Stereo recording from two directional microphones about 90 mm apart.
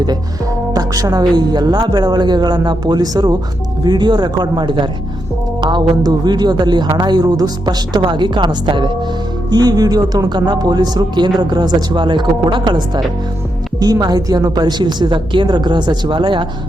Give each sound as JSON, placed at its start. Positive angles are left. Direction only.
{"t": 0.7, "sound": "speech", "side_deg": -45}
{"t": 8.0, "sound": "a woman's voice", "side_deg": -60}
{"t": 9.5, "sound": "a woman's voice", "side_deg": -50}